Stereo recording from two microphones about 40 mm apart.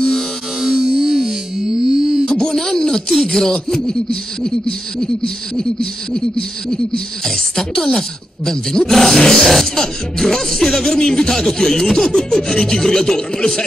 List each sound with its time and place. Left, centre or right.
0.6 s music: centre
1.8 s wail: centre
2.3 s a sound: centre
3.3 s speech: centre
7.2 s speech: centre